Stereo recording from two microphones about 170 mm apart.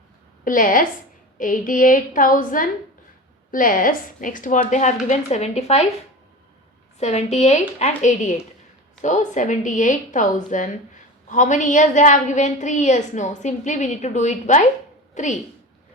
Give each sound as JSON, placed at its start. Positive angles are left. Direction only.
{"t": 0.4, "sound": "a woman's voice", "side_deg": 50}
{"t": 7.0, "sound": "a woman's voice", "side_deg": 40}